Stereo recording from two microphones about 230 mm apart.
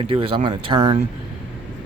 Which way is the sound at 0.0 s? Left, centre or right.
Right.